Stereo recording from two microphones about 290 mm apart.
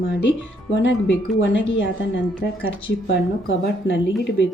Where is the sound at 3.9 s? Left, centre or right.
Left.